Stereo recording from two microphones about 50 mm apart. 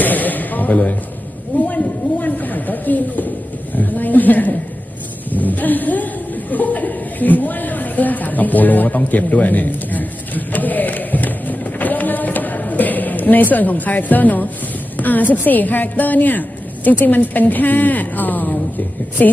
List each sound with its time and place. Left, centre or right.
0.0 s a sound: left
5.3 s chuckle: left
14.9 s a woman's voice: left